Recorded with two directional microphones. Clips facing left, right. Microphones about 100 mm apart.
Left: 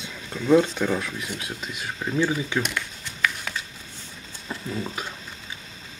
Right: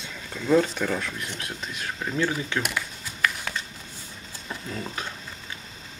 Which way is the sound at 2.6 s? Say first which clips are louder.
Left 1 dB; 5° right (ahead or behind).